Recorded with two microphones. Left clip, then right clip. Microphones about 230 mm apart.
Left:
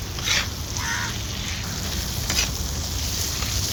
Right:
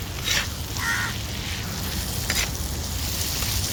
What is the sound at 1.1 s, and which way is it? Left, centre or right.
Sizzle, centre.